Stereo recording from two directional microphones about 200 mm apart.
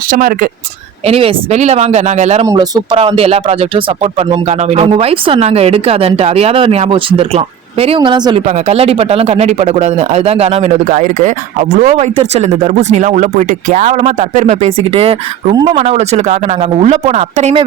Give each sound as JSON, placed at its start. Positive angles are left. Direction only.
{"t": 0.1, "sound": "speech", "side_deg": -45}
{"t": 1.0, "sound": "speech", "side_deg": -30}
{"t": 2.5, "sound": "speech", "side_deg": -20}
{"t": 8.4, "sound": "speech", "side_deg": -35}